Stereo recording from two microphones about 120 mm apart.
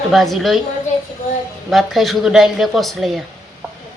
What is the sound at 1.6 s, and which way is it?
Speech, centre (ahead or behind).